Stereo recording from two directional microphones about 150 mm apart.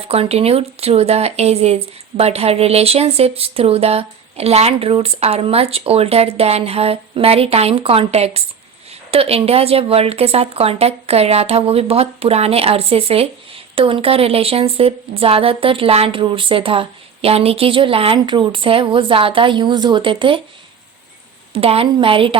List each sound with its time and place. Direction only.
0.1 s speech: 40° right (ahead or behind)
21.5 s speech: 40° right (ahead or behind)